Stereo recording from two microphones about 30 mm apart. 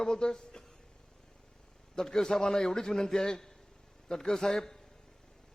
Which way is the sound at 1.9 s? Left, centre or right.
Centre.